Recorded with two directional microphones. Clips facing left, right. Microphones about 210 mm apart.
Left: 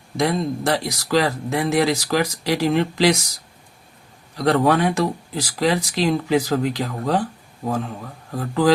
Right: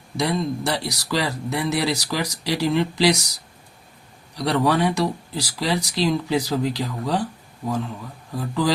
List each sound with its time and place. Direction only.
0.2 s speech: 90° left
0.7 s speech: 45° left (ahead or behind)
4.4 s speech: 50° left (ahead or behind)
8.3 s speech: 45° left (ahead or behind)